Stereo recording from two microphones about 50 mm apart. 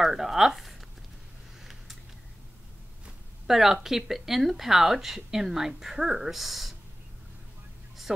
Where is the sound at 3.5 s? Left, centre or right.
Centre.